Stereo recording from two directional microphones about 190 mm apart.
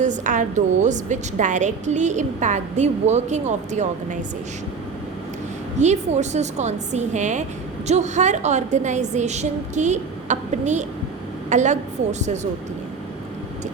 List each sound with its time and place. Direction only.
0.0 s a woman's voice: 40° right (ahead or behind)
5.8 s a woman's voice: 35° right (ahead or behind)